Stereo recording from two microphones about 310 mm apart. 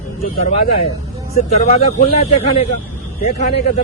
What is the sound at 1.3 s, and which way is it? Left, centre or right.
Speech, left.